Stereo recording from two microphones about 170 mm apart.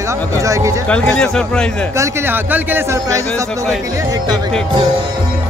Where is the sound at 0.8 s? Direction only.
5° left (ahead or behind).